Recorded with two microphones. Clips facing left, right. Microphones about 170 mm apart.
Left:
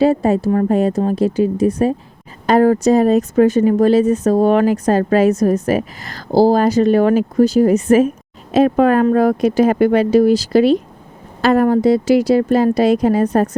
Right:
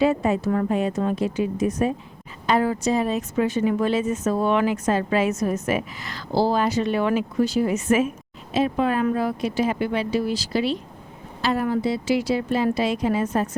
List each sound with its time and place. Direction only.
0.0 s speech: 35° left (ahead or behind)
8.5 s speech: 55° left (ahead or behind)